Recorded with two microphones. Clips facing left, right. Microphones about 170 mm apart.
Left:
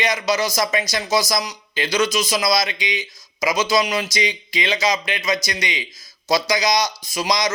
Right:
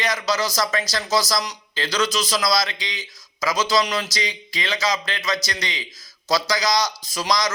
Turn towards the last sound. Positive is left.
turn(degrees=15)  # may be behind; listen again after turning